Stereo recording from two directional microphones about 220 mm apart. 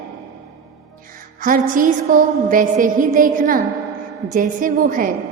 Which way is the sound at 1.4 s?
35° right (ahead or behind).